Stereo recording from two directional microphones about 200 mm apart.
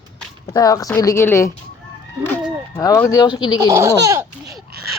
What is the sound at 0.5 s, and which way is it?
A woman's voice, 15° left (ahead or behind).